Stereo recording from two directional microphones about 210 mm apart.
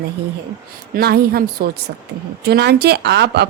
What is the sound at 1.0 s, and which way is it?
A woman's voice, 50° right (ahead or behind).